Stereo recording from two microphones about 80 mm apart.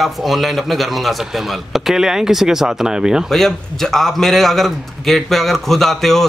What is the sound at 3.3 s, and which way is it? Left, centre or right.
A man's voice, centre.